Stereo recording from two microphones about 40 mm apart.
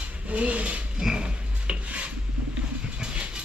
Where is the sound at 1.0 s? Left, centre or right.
Centre.